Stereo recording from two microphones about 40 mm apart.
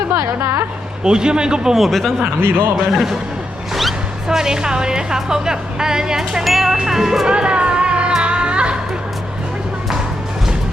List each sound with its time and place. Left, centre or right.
1.0 s a man's voice: centre
1.7 s speech: centre
2.4 s a man's voice: right
2.7 s a woman's voice: centre
4.3 s a woman's voice: centre
7.3 s music: right